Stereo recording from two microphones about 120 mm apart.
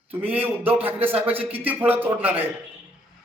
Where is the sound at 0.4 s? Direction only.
15° right (ahead or behind).